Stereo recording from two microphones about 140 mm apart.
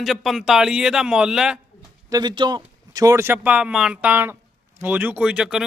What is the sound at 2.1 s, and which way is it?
A man's voice, 30° right (ahead or behind).